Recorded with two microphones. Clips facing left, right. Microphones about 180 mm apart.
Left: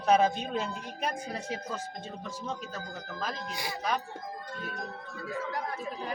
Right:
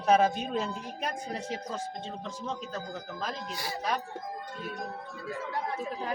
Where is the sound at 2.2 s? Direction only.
5° left (ahead or behind).